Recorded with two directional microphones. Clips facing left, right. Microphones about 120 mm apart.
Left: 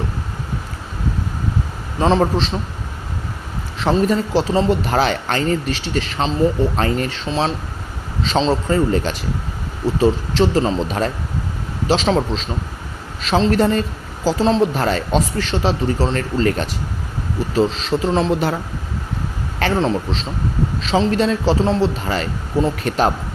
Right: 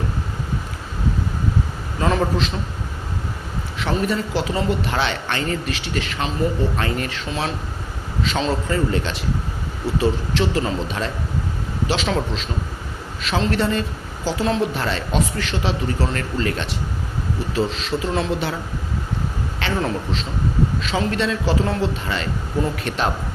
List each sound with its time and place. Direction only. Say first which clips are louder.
2.0 s a man's voice: left 4 dB; 30° left (ahead or behind)
3.8 s a man's voice: left 5 dB; 35° left (ahead or behind)
19.8 s a man's voice: left 4 dB; 30° left (ahead or behind)